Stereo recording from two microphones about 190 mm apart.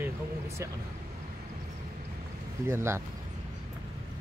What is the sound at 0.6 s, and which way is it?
Speech, 15° right (ahead or behind).